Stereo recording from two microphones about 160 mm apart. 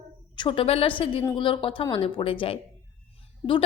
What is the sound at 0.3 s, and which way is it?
A woman's voice, 35° left (ahead or behind).